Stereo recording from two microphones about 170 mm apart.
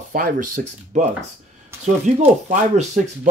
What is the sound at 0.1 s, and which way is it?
Speech, 55° right (ahead or behind).